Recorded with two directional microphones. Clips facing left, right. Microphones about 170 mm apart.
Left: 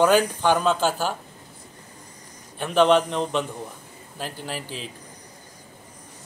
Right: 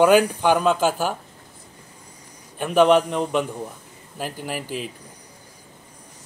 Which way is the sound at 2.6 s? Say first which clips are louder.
Right 2 dB; 10° right (ahead or behind).